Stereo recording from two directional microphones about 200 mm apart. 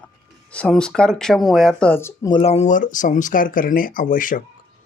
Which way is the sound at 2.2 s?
30° left (ahead or behind).